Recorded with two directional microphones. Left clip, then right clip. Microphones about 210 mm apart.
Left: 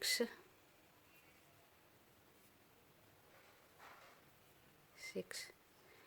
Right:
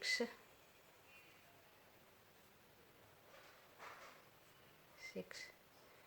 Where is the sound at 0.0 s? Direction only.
50° left (ahead or behind).